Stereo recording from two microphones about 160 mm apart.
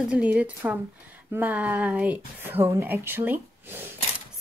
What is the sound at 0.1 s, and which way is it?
Speech, 10° right (ahead or behind).